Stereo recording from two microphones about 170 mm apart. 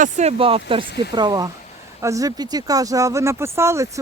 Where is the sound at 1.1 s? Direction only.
20° right (ahead or behind).